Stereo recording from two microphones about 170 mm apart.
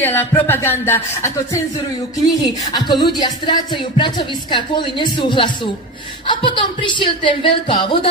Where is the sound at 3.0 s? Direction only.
25° left (ahead or behind).